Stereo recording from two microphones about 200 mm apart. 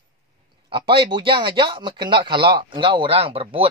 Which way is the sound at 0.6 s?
25° right (ahead or behind).